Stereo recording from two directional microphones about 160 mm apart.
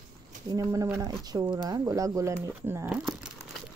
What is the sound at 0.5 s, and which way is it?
Speech, 20° right (ahead or behind).